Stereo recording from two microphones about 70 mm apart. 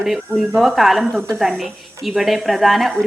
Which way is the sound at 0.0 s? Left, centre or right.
Centre.